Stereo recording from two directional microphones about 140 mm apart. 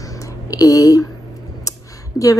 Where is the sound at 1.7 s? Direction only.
25° left (ahead or behind).